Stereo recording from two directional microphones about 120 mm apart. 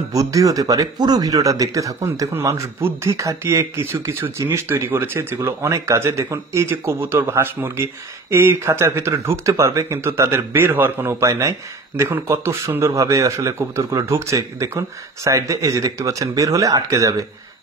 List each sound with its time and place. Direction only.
0.1 s speech: 30° right (ahead or behind)